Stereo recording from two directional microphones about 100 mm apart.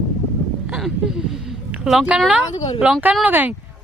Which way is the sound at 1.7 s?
5° right (ahead or behind).